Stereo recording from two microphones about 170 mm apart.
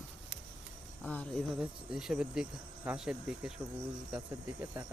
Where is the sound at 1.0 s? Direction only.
5° left (ahead or behind).